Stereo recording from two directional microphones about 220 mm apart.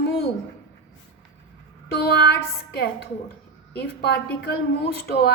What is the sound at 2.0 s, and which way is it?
A woman's voice, 45° left (ahead or behind).